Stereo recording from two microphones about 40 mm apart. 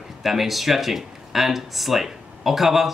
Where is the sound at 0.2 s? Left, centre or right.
Centre.